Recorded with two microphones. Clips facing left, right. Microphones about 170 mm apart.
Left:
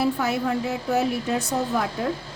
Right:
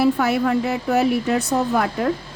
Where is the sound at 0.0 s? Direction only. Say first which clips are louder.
Right 5 dB; 70° right (ahead or behind).